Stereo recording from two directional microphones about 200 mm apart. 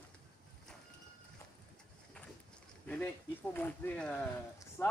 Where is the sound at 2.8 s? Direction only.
10° left (ahead or behind).